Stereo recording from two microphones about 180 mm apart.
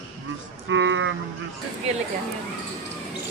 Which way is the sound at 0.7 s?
90° right.